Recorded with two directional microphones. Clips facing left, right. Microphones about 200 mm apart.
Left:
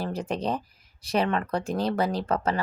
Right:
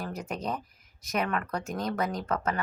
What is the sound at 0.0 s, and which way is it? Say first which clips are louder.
Speech: left 5 dB; 30° left (ahead or behind).